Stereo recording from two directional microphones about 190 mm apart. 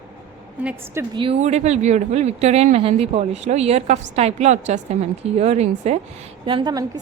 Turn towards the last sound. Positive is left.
turn(degrees=-20)  # may be behind; listen again after turning